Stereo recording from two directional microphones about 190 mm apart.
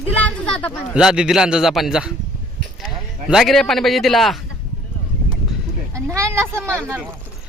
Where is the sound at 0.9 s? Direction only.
5° right (ahead or behind).